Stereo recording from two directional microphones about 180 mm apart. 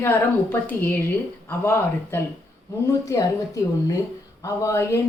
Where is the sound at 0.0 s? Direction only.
15° left (ahead or behind).